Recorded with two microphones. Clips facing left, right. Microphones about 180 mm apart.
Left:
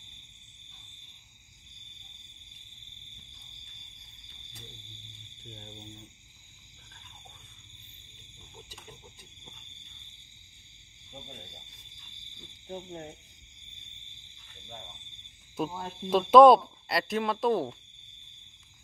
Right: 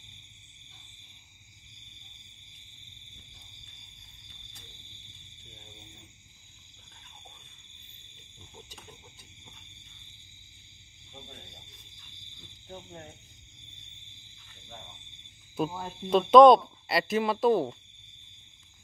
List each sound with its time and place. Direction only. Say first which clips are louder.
12.6 s speech: left 5 dB; 20° left (ahead or behind)
15.5 s speech: right 2 dB; centre (ahead or behind)